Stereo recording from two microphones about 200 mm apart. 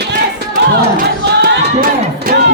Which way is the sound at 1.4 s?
45° right (ahead or behind).